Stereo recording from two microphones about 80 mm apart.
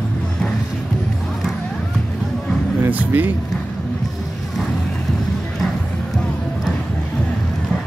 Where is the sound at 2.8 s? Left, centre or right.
Right.